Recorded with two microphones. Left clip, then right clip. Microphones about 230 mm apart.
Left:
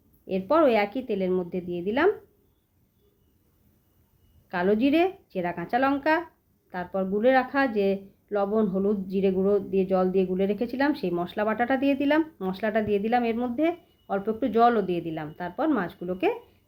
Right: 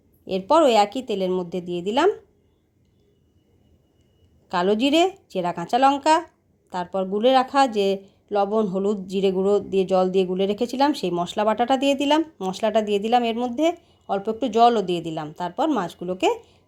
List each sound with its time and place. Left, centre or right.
0.3 s speech: right
4.4 s speech: right